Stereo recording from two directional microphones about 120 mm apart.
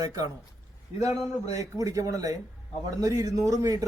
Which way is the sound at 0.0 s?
30° right (ahead or behind).